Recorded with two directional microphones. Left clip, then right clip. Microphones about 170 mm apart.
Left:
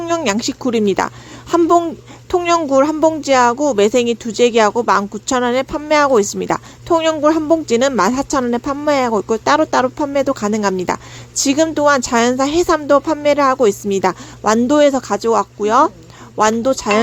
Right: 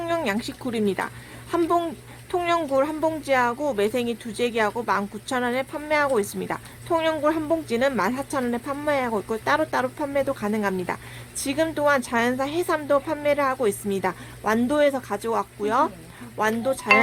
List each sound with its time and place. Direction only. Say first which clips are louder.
0.3 s speech: left 10 dB; 35° left (ahead or behind)